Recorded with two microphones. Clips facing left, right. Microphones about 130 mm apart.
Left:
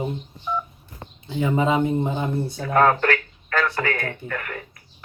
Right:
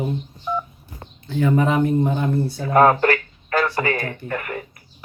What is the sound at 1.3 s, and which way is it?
Speech, 15° left (ahead or behind).